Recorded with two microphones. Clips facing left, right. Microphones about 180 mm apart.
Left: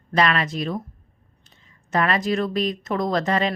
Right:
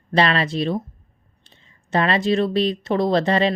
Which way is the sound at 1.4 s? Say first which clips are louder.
Right 2 dB; 30° right (ahead or behind).